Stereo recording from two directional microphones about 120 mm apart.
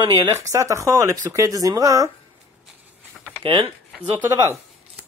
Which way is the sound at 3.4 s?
45° right (ahead or behind).